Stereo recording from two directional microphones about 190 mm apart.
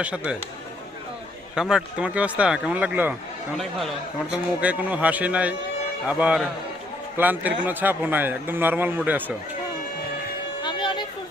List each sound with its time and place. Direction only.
1.5 s speech: 5° right (ahead or behind)
4.3 s a man's voice: 5° right (ahead or behind)
10.6 s music: 25° left (ahead or behind)